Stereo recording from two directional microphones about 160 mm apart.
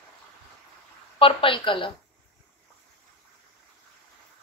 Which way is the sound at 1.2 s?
35° left (ahead or behind).